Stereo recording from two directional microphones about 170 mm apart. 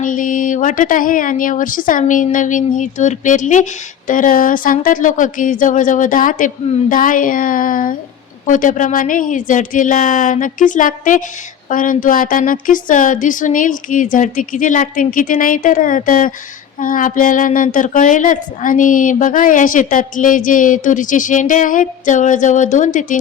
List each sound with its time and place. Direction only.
0.0 s speech: 50° left (ahead or behind)